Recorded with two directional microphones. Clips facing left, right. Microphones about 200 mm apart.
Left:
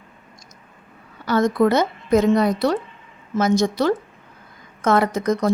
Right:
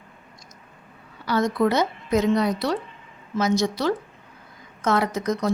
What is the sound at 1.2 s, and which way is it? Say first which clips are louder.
Speech: left 4 dB; 50° left (ahead or behind).